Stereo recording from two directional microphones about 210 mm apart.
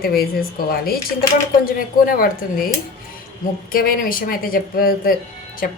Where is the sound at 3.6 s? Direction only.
45° left (ahead or behind).